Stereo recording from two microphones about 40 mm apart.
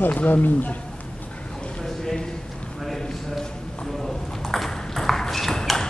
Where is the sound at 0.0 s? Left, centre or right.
Left.